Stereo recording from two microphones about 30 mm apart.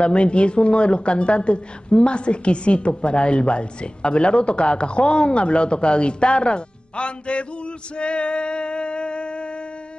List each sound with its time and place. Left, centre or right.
0.0 s a woman's voice: left